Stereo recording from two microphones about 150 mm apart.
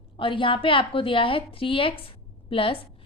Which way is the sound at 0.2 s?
35° left (ahead or behind).